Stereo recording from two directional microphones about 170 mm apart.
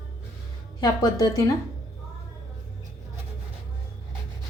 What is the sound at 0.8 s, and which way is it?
Speech, 20° left (ahead or behind).